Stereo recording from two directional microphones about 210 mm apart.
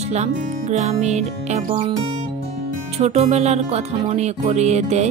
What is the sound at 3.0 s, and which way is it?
Speech, 30° right (ahead or behind).